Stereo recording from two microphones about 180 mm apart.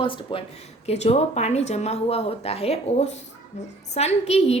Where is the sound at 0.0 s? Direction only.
30° left (ahead or behind).